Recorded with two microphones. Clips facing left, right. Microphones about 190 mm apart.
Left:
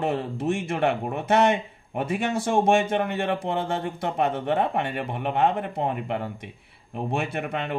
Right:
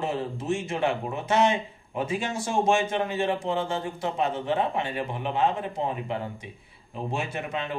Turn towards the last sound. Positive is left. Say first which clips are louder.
# left 3 dB
turn(degrees=60)  # may be behind; listen again after turning